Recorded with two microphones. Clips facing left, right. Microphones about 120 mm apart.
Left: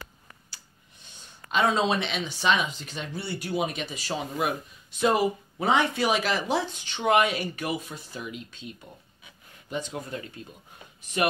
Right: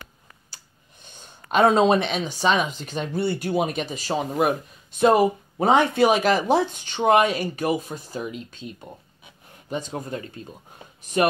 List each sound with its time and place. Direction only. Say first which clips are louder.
1.5 s speech: right 7 dB; 50° right (ahead or behind)